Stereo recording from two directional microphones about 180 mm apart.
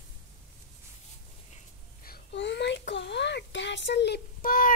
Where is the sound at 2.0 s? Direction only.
65° left (ahead or behind).